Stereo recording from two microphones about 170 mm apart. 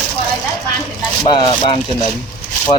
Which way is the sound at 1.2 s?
30° left (ahead or behind).